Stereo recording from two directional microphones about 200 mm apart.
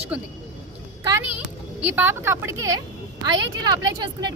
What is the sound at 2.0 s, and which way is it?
Speech, 10° right (ahead or behind).